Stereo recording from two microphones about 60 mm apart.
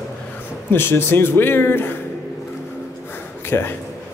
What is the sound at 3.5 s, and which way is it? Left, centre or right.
Speech, left.